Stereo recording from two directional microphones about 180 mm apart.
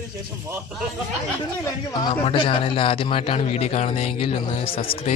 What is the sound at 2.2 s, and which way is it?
A man's voice, 30° left (ahead or behind).